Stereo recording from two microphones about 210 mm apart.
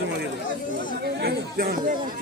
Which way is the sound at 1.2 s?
45° right (ahead or behind).